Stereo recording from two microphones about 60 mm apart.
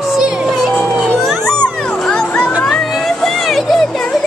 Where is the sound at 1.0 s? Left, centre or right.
Centre.